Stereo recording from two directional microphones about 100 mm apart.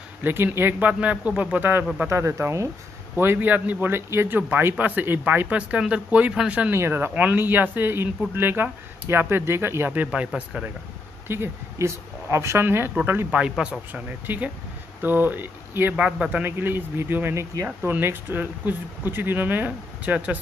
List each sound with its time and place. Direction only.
0.2 s a man's voice: 20° right (ahead or behind)
6.7 s speech: 25° right (ahead or behind)
11.2 s speech: 25° right (ahead or behind)
13.4 s a man's voice: 10° right (ahead or behind)